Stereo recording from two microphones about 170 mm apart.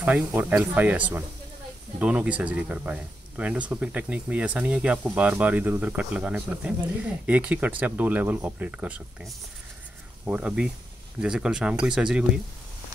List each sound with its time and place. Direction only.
0.0 s speech: 10° right (ahead or behind)